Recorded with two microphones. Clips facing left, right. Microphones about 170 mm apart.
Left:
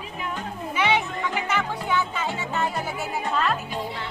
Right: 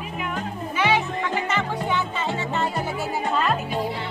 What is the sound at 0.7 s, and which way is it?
Music, 20° left (ahead or behind).